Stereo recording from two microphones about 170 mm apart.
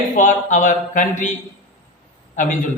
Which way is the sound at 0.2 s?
50° left (ahead or behind).